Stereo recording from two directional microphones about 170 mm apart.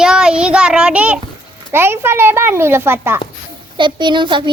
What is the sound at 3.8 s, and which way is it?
Speech, 25° right (ahead or behind).